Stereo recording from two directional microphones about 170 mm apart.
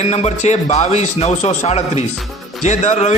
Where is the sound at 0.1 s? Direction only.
40° left (ahead or behind).